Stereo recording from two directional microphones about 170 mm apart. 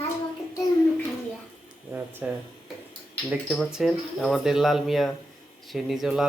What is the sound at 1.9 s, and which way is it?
Speech, 10° right (ahead or behind).